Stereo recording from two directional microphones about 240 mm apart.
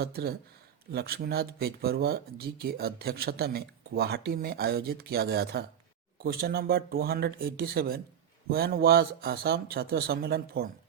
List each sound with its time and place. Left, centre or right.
0.0 s speech: right